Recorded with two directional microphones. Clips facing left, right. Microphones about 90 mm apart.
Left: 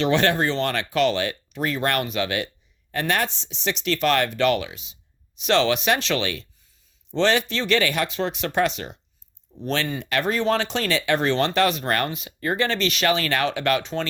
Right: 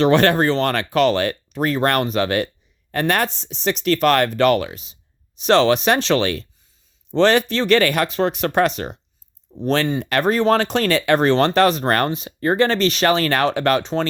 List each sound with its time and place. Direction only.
0.0 s speech: 50° right (ahead or behind)